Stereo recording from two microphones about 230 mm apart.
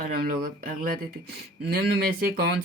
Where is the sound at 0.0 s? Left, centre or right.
Right.